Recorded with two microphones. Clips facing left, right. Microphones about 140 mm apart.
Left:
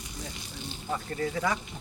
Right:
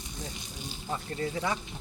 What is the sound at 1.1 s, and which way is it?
Speech, 30° right (ahead or behind).